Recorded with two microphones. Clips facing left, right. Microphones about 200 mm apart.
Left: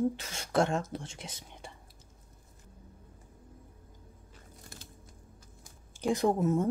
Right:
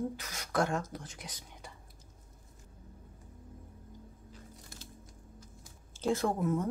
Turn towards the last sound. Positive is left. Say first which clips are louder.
# left 4 dB
turn(degrees=25)  # may be behind; listen again after turning